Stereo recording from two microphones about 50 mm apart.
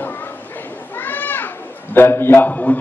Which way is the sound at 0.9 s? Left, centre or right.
Left.